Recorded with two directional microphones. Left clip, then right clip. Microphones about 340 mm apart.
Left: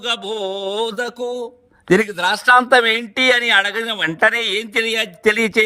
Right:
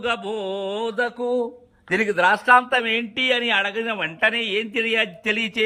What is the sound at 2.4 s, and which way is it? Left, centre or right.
Mantra, centre.